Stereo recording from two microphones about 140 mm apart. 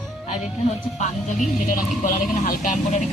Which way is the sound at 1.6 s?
75° left (ahead or behind).